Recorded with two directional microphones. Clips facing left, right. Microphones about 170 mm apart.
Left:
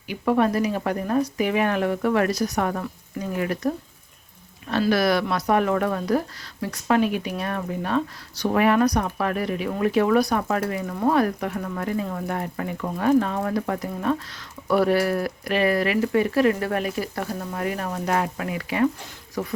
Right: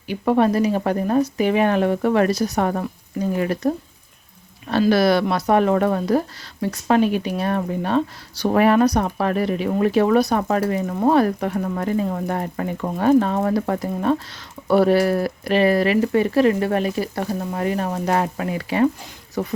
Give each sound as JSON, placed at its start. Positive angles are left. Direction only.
{"t": 0.1, "sound": "speech", "side_deg": -30}
{"t": 4.9, "sound": "speech", "side_deg": -30}